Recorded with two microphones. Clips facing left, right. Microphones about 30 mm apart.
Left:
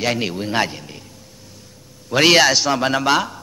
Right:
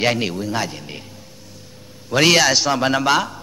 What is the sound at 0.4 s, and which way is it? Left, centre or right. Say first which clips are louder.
Speech: left 3 dB; left.